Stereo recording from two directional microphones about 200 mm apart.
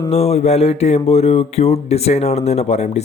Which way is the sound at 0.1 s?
30° left (ahead or behind).